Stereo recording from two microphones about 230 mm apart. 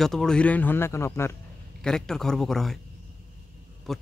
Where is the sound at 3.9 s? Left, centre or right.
Centre.